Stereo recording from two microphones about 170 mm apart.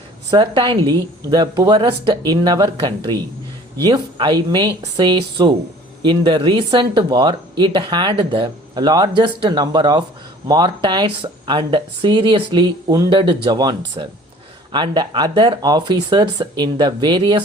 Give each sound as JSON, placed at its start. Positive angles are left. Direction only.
{"t": 0.3, "sound": "speech", "side_deg": -25}